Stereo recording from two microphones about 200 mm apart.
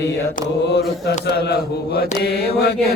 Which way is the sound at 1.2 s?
55° left (ahead or behind).